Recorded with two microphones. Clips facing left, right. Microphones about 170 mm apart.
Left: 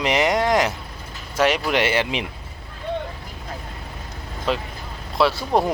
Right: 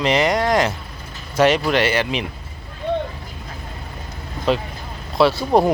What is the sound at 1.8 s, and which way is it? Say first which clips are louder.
Speech: right 2 dB; 20° left (ahead or behind).